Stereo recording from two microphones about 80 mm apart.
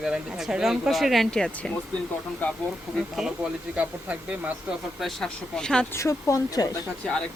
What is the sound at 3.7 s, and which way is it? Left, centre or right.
Speech, centre.